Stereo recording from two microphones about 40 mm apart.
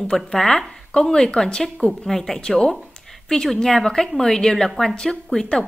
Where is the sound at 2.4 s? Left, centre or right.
Centre.